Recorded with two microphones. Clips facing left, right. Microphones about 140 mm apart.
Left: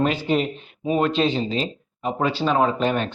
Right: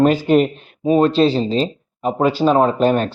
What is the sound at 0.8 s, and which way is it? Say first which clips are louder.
Speech: right 7 dB; 35° right (ahead or behind).